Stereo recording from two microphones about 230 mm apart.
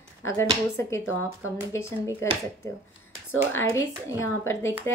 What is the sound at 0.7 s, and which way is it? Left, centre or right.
Speech, centre.